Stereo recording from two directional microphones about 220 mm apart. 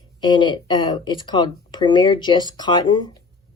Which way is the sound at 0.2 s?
20° left (ahead or behind).